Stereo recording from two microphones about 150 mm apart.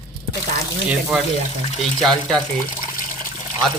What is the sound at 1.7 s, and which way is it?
Speech, centre (ahead or behind).